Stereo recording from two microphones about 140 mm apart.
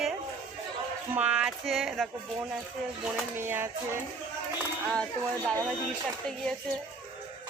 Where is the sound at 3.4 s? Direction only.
15° right (ahead or behind).